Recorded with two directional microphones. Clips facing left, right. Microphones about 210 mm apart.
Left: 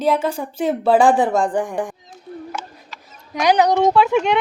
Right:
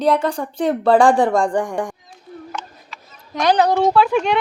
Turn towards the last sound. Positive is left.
turn(degrees=20)  # may be behind; listen again after turning